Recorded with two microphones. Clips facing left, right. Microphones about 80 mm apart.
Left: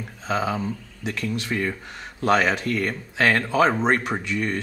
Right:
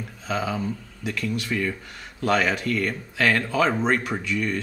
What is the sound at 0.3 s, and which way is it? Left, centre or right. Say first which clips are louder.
Speech: left 2 dB; left.